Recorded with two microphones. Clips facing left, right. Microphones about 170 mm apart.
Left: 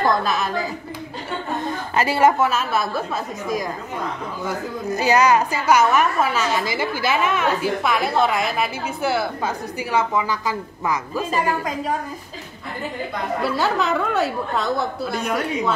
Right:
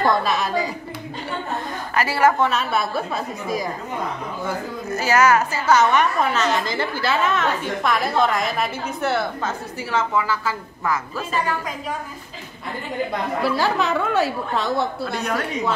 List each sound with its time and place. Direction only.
0.0 s speech: centre (ahead or behind)
2.0 s a woman's voice: 20° left (ahead or behind)
2.3 s speech: 5° left (ahead or behind)
4.9 s a woman's voice: 15° left (ahead or behind)
13.4 s speech: centre (ahead or behind)